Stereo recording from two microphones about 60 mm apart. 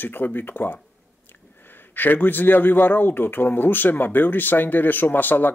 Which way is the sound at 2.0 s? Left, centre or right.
Left.